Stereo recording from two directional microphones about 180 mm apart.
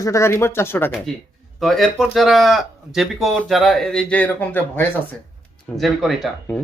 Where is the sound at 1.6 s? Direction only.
Centre (ahead or behind).